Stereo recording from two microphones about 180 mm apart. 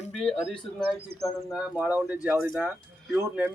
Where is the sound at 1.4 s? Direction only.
5° right (ahead or behind).